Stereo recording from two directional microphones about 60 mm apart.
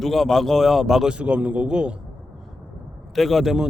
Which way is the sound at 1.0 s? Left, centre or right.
Centre.